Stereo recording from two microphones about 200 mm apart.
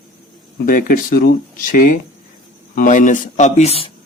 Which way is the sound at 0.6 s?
45° left (ahead or behind).